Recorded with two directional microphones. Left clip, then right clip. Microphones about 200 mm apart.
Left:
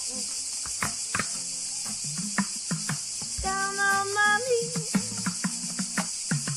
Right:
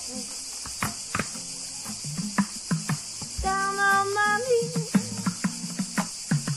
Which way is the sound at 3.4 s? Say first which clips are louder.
Right 3 dB; centre (ahead or behind).